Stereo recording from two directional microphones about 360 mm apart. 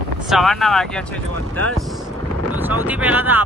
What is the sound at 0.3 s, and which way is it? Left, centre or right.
Speech, centre.